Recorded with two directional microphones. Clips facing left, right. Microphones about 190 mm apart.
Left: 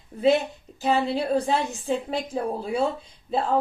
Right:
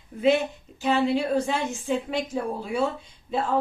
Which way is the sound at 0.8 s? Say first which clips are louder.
Right 1 dB; 35° left (ahead or behind).